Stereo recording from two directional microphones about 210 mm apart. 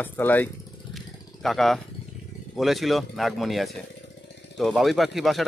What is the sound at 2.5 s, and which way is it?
Speech, centre (ahead or behind).